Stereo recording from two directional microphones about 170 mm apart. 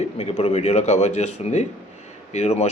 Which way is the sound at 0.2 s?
35° left (ahead or behind).